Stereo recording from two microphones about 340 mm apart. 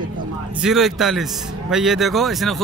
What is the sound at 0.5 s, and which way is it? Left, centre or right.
A man's voice, centre.